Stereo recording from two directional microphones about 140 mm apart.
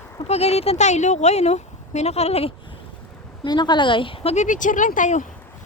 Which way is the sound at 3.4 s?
30° left (ahead or behind).